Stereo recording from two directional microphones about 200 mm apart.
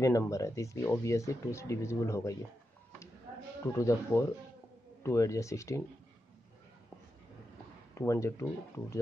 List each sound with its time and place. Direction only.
0.0 s speech: 15° left (ahead or behind)
3.6 s speech: 15° left (ahead or behind)
7.9 s speech: 15° left (ahead or behind)